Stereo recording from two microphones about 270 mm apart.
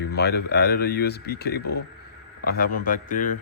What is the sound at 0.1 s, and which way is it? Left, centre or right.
A man's voice, left.